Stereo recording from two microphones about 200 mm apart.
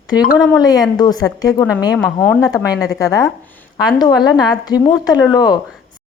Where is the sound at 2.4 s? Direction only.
20° left (ahead or behind).